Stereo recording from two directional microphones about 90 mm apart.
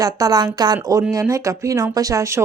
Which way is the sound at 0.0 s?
45° right (ahead or behind).